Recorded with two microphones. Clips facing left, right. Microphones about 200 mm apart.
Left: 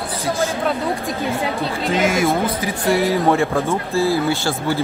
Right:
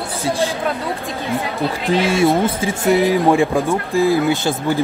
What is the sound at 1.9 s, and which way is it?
Speech, 30° right (ahead or behind).